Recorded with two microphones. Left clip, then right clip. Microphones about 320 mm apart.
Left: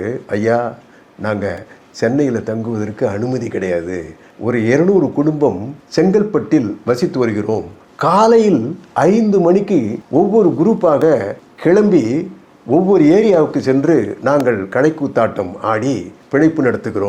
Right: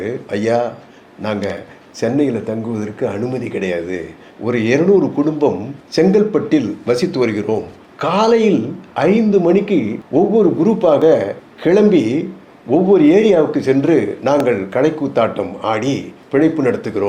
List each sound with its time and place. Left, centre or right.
0.0 s a man's voice: left